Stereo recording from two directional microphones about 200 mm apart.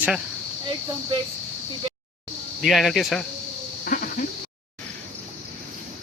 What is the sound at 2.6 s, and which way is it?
Speech, centre (ahead or behind).